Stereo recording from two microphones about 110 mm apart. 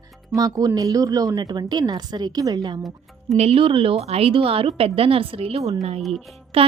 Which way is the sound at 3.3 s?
65° right (ahead or behind).